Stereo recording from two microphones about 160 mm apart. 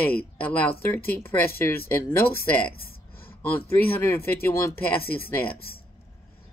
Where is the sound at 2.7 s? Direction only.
70° left (ahead or behind).